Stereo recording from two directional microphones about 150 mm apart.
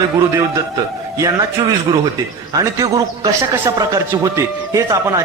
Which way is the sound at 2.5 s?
25° right (ahead or behind).